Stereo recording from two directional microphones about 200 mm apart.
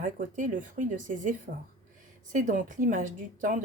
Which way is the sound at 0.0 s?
40° right (ahead or behind).